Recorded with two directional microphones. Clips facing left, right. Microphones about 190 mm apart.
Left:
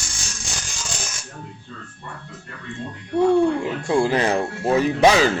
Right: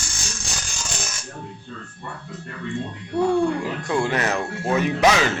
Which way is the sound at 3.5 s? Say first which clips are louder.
Left 3 dB; 30° left (ahead or behind).